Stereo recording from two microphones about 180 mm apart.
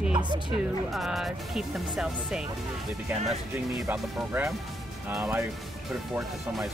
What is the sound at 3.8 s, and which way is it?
Speech, 5° right (ahead or behind).